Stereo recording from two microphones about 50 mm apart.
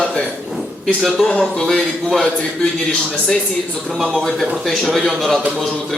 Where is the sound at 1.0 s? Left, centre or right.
Centre.